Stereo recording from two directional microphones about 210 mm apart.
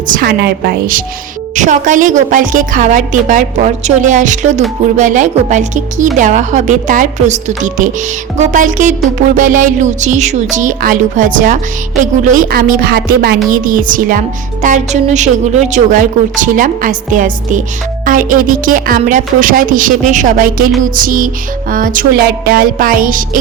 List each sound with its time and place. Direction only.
0.1 s speech: 45° right (ahead or behind)